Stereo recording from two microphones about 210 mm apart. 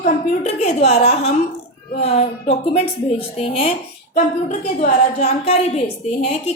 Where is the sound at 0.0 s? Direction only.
30° left (ahead or behind).